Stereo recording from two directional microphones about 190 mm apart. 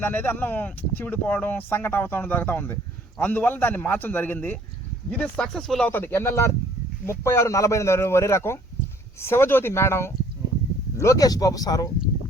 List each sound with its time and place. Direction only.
0.0 s speech: 10° left (ahead or behind)